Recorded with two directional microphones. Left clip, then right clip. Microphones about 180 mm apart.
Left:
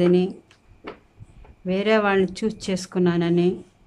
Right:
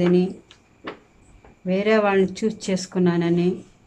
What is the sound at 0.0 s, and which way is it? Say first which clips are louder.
Speech: left 1 dB; 25° left (ahead or behind).